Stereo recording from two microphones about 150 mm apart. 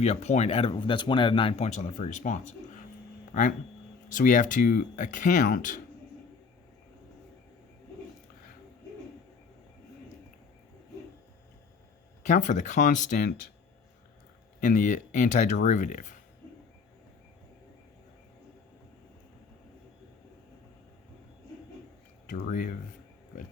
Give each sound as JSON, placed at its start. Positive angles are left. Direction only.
{"t": 0.0, "sound": "speech", "side_deg": 45}
{"t": 4.1, "sound": "speech", "side_deg": 60}
{"t": 12.2, "sound": "speech", "side_deg": 55}
{"t": 14.6, "sound": "speech", "side_deg": 55}
{"t": 22.3, "sound": "speech", "side_deg": 60}